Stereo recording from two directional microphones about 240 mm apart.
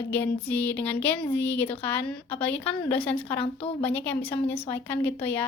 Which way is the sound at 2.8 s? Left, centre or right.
Centre.